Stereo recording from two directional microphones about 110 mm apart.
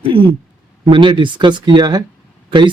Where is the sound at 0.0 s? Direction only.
55° right (ahead or behind).